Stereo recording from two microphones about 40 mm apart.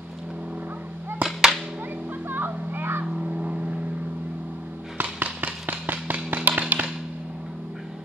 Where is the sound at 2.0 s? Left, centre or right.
Right.